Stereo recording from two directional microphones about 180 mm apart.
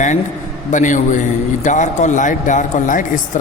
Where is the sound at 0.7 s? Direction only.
45° left (ahead or behind).